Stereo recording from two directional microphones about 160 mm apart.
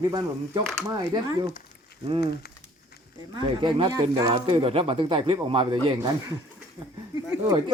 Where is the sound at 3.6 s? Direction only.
30° right (ahead or behind).